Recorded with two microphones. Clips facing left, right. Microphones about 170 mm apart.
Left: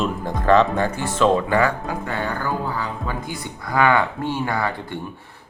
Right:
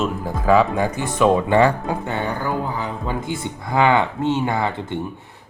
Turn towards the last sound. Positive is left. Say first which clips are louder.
# right 2 dB
turn(degrees=-20)  # may be behind; listen again after turning